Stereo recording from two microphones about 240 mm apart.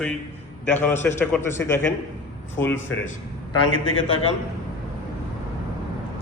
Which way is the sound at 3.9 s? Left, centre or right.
Left.